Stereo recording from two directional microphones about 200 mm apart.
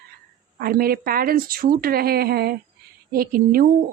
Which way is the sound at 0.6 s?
50° right (ahead or behind).